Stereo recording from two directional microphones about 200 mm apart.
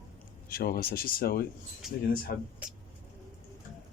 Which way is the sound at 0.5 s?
50° left (ahead or behind).